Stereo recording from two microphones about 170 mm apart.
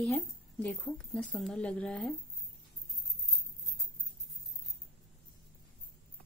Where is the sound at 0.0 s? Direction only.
5° left (ahead or behind).